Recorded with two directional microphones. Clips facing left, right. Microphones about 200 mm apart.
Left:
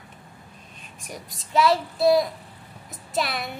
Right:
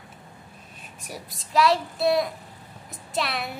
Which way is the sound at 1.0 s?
5° right (ahead or behind).